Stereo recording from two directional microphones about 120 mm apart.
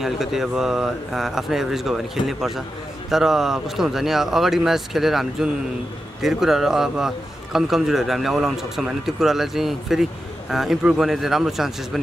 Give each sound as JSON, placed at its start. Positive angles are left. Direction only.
{"t": 0.0, "sound": "a man's voice", "side_deg": -5}